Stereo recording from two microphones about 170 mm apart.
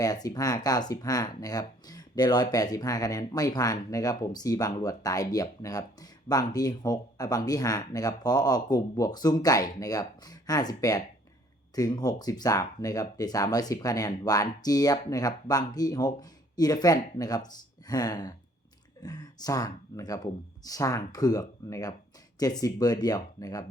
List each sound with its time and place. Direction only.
0.0 s speech: 20° left (ahead or behind)